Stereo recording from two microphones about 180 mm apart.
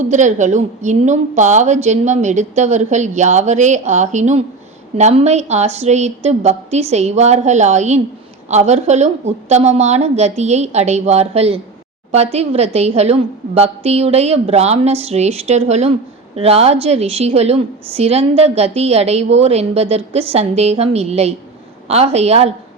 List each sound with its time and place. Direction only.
0.0 s a woman's voice: 40° right (ahead or behind)